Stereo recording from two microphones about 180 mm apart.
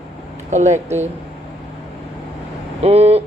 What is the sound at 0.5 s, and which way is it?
Speech, 40° right (ahead or behind).